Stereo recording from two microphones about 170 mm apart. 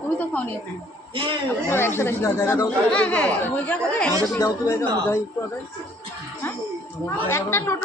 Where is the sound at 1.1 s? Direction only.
30° right (ahead or behind).